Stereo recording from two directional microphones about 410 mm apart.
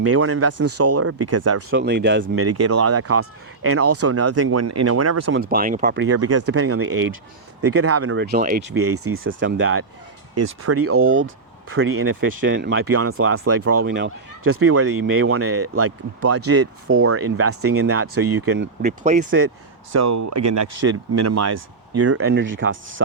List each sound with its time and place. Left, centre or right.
0.0 s speech: right
5.4 s speech: right
10.8 s speech: right
18.2 s speech: right
18.4 s speech: right
19.9 s speech: right